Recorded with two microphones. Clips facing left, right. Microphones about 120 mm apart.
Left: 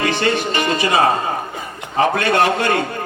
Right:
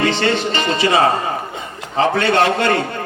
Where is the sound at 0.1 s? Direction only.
25° right (ahead or behind).